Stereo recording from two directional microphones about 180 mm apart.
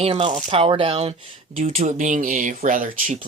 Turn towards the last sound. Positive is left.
turn(degrees=-50)  # may be behind; listen again after turning